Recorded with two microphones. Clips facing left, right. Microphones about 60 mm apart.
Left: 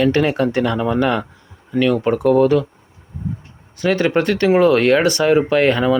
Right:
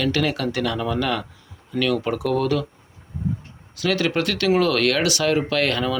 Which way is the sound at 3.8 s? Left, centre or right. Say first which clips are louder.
Left 5 dB; left.